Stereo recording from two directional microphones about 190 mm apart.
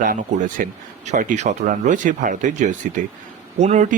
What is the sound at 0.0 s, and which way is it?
Speech, 45° right (ahead or behind).